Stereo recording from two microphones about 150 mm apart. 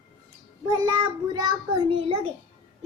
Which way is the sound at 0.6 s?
30° right (ahead or behind).